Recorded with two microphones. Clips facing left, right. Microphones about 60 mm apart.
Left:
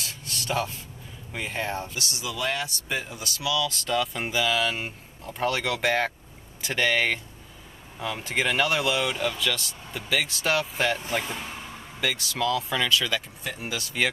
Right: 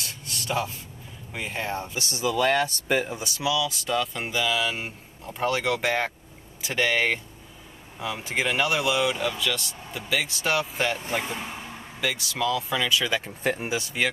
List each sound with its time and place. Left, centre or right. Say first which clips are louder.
0.0 s a sound: even; centre
1.3 s speech: even; centre
2.0 s speech: right 6 dB; right
3.2 s speech: right 3 dB; right
3.5 s speech: left 2 dB; centre
11.1 s speech: right 1 dB; centre
12.0 s speech: even; centre
12.9 s speech: right 1 dB; centre
13.2 s speech: right 8 dB; right
13.7 s speech: right 4 dB; right